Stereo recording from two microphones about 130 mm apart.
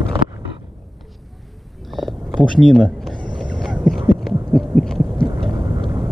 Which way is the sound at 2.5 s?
5° left (ahead or behind).